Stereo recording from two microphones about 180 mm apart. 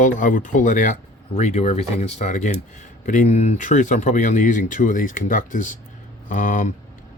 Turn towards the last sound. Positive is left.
turn(degrees=45)  # may be behind; listen again after turning